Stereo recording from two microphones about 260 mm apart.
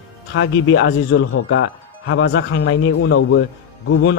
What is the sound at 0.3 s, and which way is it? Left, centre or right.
Speech, left.